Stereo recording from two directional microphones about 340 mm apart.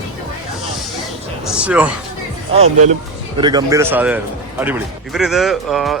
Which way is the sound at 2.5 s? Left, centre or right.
Centre.